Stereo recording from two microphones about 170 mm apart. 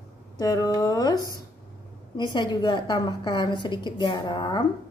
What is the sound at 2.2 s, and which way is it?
A woman's voice, 25° left (ahead or behind).